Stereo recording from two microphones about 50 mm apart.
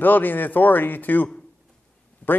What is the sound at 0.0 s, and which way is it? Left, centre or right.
A man's voice, left.